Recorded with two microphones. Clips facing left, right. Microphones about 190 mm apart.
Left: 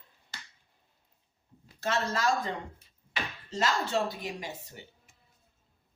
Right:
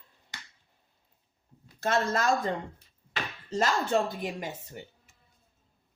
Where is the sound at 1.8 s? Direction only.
50° right (ahead or behind).